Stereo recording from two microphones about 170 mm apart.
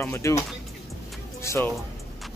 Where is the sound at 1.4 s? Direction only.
15° left (ahead or behind).